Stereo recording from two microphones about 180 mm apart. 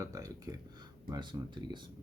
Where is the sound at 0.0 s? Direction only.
20° right (ahead or behind).